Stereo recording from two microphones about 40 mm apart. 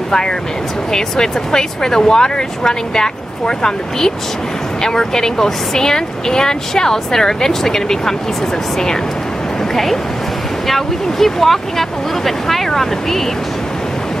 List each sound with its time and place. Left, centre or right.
0.9 s speech: centre
10.7 s speech: centre